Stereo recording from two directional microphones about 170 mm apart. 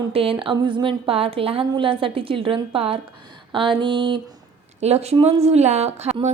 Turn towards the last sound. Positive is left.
turn(degrees=-40)  # may be behind; listen again after turning